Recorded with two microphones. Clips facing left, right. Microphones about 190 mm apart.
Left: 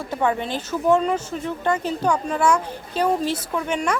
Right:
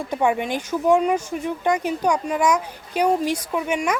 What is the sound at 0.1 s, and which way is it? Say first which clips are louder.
Speech: right 1 dB; 10° right (ahead or behind).